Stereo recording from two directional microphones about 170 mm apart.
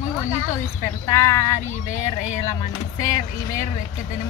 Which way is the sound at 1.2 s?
15° left (ahead or behind).